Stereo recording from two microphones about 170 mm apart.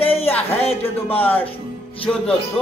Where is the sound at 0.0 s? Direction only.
35° left (ahead or behind).